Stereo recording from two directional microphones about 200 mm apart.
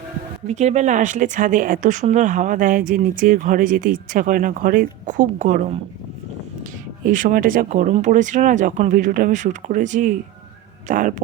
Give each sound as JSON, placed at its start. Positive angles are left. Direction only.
{"t": 0.4, "sound": "speech", "side_deg": -35}